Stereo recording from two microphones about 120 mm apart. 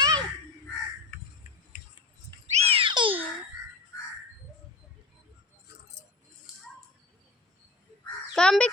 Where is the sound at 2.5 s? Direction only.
50° right (ahead or behind).